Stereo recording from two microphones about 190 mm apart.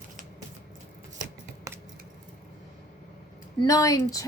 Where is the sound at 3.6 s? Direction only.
20° left (ahead or behind).